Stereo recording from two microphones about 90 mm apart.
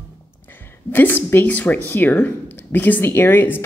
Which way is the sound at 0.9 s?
25° left (ahead or behind).